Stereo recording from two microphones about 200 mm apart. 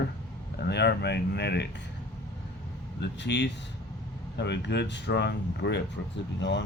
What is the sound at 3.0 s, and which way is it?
Speech, 60° left (ahead or behind).